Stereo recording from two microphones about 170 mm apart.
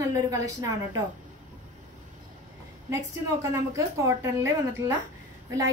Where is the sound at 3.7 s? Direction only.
15° right (ahead or behind).